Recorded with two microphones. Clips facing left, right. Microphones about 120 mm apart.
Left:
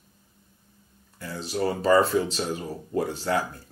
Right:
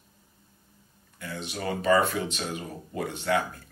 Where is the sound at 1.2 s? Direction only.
35° left (ahead or behind).